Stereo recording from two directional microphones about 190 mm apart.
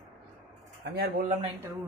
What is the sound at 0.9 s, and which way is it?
Speech, 55° right (ahead or behind).